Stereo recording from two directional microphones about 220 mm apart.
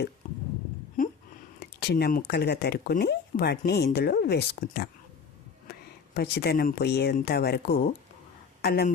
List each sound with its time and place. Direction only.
1.0 s a sound: 40° left (ahead or behind)
1.5 s speech: 45° left (ahead or behind)
6.1 s speech: 45° left (ahead or behind)